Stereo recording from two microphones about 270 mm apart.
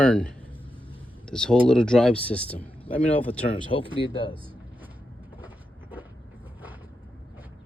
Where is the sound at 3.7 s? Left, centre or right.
Left.